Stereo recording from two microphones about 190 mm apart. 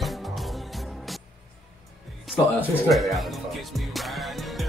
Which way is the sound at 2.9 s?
Centre (ahead or behind).